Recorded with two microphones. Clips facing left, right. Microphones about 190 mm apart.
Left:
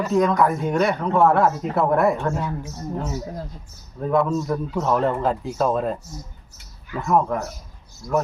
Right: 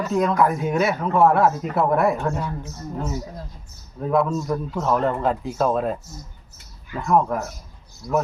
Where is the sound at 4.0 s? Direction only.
Centre (ahead or behind).